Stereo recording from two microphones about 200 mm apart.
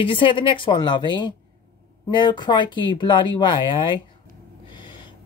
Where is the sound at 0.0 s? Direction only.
25° left (ahead or behind).